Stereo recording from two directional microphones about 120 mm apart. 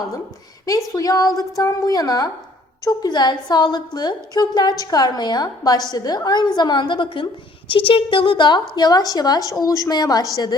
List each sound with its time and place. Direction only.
0.9 s a woman's voice: 30° left (ahead or behind)